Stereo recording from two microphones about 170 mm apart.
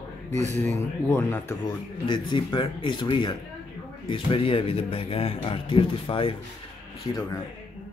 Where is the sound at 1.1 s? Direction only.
15° left (ahead or behind).